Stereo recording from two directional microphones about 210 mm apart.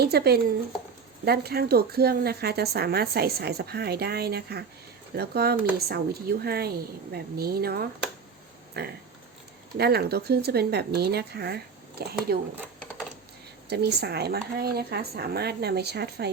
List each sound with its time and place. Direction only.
0.0 s a woman's voice: 50° right (ahead or behind)
13.7 s a woman's voice: 50° right (ahead or behind)